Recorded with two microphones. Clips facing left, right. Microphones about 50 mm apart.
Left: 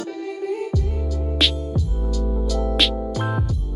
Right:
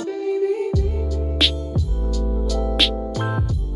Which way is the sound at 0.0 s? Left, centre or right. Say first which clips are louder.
Right 6 dB; centre.